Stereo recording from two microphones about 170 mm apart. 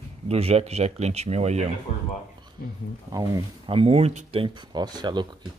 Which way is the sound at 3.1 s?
20° right (ahead or behind).